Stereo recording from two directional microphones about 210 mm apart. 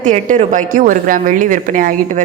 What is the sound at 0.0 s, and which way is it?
Speech, 35° right (ahead or behind).